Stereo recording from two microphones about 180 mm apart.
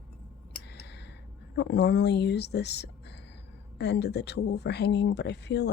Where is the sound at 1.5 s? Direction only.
70° left (ahead or behind).